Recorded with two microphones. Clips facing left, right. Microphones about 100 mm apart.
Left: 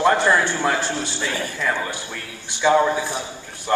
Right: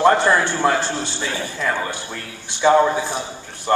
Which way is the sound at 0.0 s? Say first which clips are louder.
Right 2 dB; 30° right (ahead or behind).